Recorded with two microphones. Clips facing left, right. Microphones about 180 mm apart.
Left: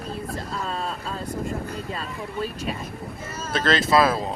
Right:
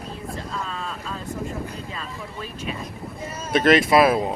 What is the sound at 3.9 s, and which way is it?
Speech, 20° right (ahead or behind).